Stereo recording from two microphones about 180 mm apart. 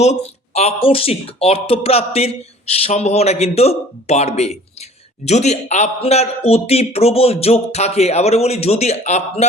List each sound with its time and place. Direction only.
0.0 s a man's voice: 40° left (ahead or behind)